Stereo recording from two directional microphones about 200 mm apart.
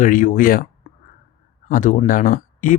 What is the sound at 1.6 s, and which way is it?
Speech, 40° left (ahead or behind).